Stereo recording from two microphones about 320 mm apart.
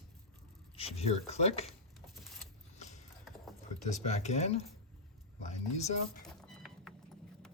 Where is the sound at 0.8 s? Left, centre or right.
Centre.